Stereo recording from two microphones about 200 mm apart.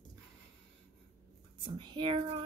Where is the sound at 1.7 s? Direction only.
25° right (ahead or behind).